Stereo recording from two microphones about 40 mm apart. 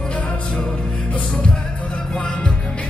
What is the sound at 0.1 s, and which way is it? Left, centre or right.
Music, left.